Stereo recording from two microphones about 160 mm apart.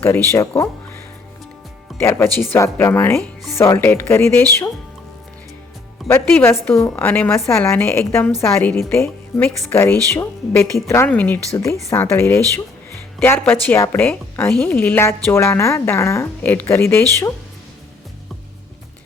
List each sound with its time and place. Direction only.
0.0 s a woman's voice: 15° left (ahead or behind)
2.0 s a woman's voice: 15° left (ahead or behind)
6.2 s a woman's voice: 5° left (ahead or behind)
6.5 s a woman's voice: 15° left (ahead or behind)